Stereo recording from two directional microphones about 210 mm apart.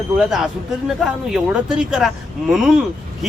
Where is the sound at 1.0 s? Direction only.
5° right (ahead or behind).